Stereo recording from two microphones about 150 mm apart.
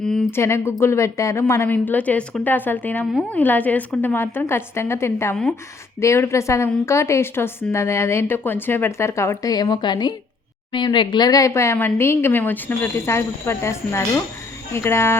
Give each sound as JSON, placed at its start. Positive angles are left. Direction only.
{"t": 0.3, "sound": "a woman's voice", "side_deg": 15}